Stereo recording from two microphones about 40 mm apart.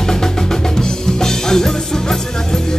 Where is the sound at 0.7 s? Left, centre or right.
Centre.